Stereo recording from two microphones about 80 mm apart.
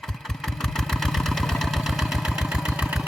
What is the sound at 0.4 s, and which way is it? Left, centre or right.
Vehicle, centre.